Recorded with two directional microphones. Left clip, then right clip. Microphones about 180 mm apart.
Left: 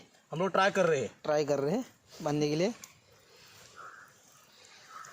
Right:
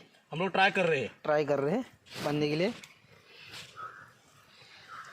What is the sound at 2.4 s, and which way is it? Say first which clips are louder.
Speech: even; 10° left (ahead or behind).